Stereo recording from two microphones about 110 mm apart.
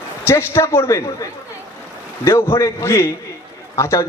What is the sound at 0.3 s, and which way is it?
A man's voice, 25° left (ahead or behind).